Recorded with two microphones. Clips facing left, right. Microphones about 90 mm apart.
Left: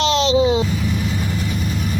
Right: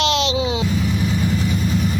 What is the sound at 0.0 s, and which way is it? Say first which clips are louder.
Vehicle: left 4 dB; 35° left (ahead or behind).